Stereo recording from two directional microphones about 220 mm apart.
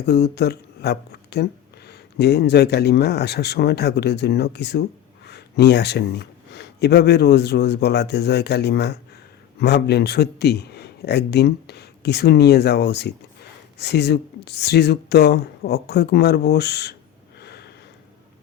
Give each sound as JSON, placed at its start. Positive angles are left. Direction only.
{"t": 0.0, "sound": "a man's voice", "side_deg": 50}
{"t": 17.4, "sound": "sniff", "side_deg": 50}